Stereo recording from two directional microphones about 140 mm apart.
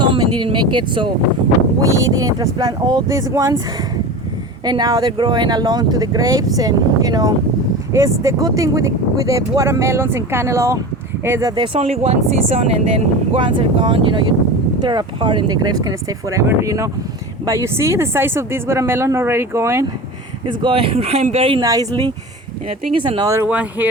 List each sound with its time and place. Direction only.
0.0 s speech: 35° right (ahead or behind)
1.8 s speech: 25° right (ahead or behind)
4.6 s speech: 30° right (ahead or behind)
11.5 s speech: 35° right (ahead or behind)
11.8 s speech: 50° right (ahead or behind)
13.4 s speech: 35° right (ahead or behind); by 19.8 s 20° right (ahead or behind)
20.4 s speech: 35° right (ahead or behind)
21.6 s speech: 25° right (ahead or behind)
23.4 s speech: 10° right (ahead or behind)